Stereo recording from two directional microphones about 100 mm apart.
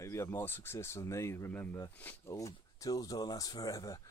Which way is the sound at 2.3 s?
35° left (ahead or behind).